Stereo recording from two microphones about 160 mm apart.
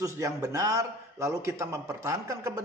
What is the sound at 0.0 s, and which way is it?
A man's voice, 20° right (ahead or behind).